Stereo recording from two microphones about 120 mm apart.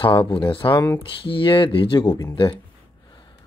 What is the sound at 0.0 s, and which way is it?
Speech, 45° left (ahead or behind).